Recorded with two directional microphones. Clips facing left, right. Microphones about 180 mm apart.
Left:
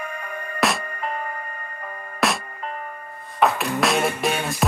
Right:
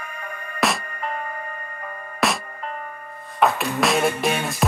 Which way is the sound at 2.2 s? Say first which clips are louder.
Even; centre (ahead or behind).